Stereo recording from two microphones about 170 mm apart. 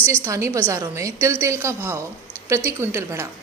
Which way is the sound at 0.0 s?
15° right (ahead or behind).